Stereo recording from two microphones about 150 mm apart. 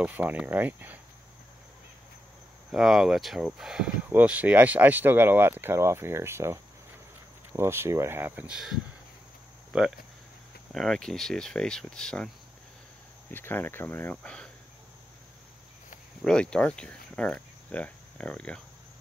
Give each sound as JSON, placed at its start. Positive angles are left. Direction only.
{"t": 0.0, "sound": "speech", "side_deg": -10}
{"t": 2.7, "sound": "speech", "side_deg": 0}
{"t": 13.3, "sound": "speech", "side_deg": 15}
{"t": 16.3, "sound": "speech", "side_deg": 5}